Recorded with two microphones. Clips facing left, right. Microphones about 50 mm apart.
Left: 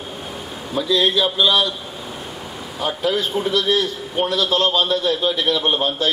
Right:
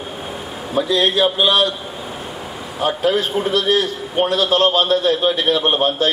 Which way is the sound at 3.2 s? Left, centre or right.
Centre.